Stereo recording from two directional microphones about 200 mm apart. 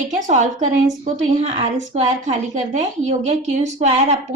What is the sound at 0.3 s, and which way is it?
A woman's voice, 35° right (ahead or behind).